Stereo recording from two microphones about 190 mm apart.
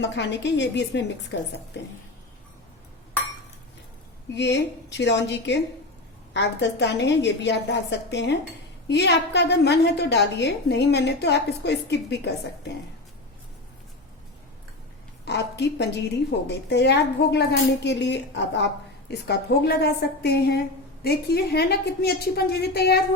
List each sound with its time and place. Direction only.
0.0 s a woman's voice: 65° left (ahead or behind)
4.4 s a woman's voice: 70° left (ahead or behind)
15.2 s a woman's voice: 65° left (ahead or behind)